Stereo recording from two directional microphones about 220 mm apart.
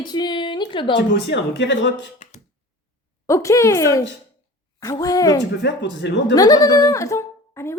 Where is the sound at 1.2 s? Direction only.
55° left (ahead or behind).